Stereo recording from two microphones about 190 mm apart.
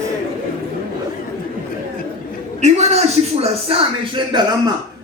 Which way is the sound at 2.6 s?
35° right (ahead or behind).